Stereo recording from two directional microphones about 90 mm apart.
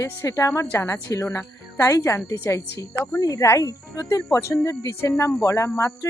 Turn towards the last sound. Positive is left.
turn(degrees=30)  # may be behind; listen again after turning